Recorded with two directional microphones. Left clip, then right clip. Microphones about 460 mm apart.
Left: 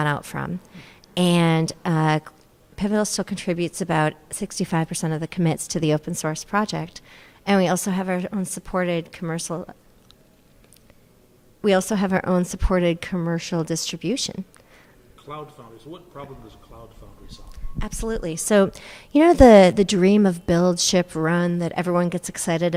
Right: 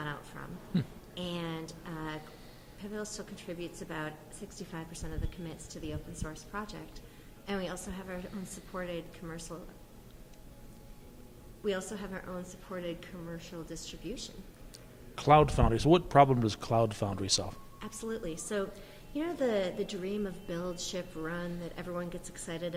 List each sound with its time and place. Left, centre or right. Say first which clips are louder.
0.0 s a woman's voice: left 16 dB; left
11.6 s a woman's voice: left 16 dB; left
15.1 s a sound: right 13 dB; right
15.9 s speech: right 16 dB; right
17.3 s speech: right 17 dB; right
17.7 s a woman's voice: left 12 dB; left